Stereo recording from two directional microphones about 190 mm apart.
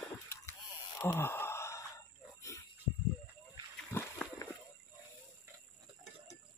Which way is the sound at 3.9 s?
10° left (ahead or behind).